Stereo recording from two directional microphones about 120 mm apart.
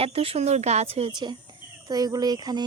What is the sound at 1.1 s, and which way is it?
Speech, 40° right (ahead or behind).